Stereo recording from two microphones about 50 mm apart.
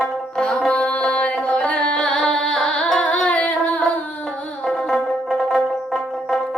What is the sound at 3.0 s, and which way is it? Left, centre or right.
Singing, left.